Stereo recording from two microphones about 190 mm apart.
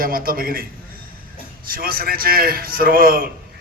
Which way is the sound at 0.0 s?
50° right (ahead or behind).